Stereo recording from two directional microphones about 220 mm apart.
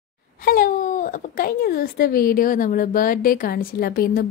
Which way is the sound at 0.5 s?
40° left (ahead or behind).